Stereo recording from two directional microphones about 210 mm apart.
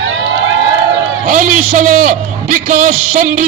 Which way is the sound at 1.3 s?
40° right (ahead or behind).